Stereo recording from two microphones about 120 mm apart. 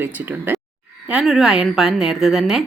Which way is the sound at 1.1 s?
5° right (ahead or behind).